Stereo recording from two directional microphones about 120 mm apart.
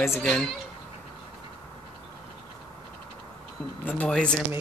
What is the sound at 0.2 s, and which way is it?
Speech, 5° left (ahead or behind).